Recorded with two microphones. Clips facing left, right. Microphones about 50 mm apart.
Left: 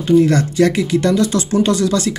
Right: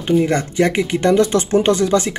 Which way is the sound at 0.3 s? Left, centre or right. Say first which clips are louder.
Left 2 dB; right.